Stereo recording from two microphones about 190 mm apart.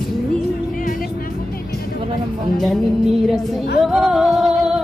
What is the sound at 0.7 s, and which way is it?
Music, 45° left (ahead or behind).